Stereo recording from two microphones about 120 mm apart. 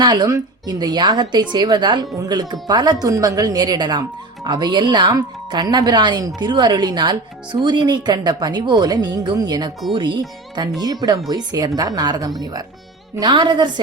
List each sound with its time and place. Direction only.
0.0 s speech: 35° right (ahead or behind)